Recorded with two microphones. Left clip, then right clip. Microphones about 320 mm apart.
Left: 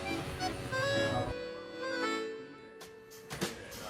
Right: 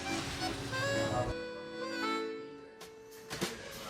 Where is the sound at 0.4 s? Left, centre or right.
Centre.